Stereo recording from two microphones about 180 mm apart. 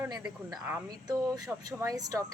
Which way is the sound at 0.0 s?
20° right (ahead or behind).